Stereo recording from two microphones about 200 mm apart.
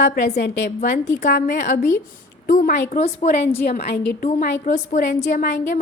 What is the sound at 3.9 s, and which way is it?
A woman's voice, 50° left (ahead or behind).